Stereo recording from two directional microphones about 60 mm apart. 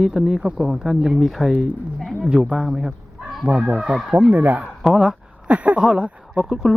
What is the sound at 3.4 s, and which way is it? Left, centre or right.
Speech, centre.